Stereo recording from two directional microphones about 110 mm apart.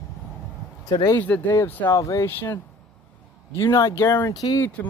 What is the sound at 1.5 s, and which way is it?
Speech, 25° left (ahead or behind).